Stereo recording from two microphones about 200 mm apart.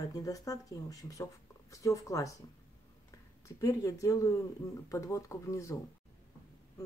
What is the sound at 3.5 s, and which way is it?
Speech, 15° left (ahead or behind).